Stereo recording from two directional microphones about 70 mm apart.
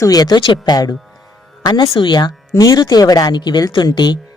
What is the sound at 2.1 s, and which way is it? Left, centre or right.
Speech, left.